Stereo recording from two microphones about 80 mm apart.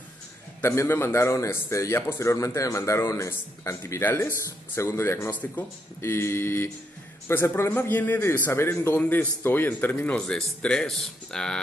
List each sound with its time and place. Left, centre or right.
0.6 s a man's voice: left
4.4 s a man's voice: left
5.3 s a man's voice: centre
5.9 s a man's voice: left
8.9 s a man's voice: left
10.1 s speech: centre